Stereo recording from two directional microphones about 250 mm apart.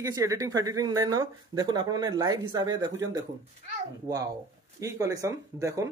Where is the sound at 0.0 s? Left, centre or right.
Centre.